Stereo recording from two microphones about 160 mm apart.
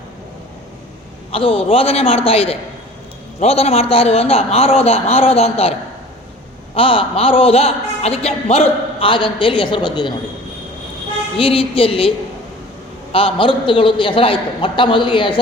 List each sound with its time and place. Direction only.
1.3 s a woman's voice: 35° left (ahead or behind)
6.7 s a woman's voice: 35° left (ahead or behind)
11.3 s a woman's voice: 35° left (ahead or behind)
13.1 s a woman's voice: 35° left (ahead or behind)